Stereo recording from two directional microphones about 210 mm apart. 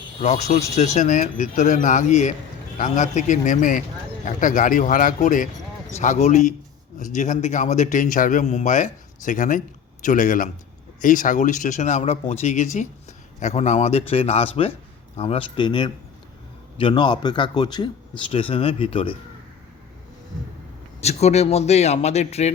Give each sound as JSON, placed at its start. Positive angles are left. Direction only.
{"t": 0.2, "sound": "a man's voice", "side_deg": 30}
{"t": 21.0, "sound": "a man's voice", "side_deg": 30}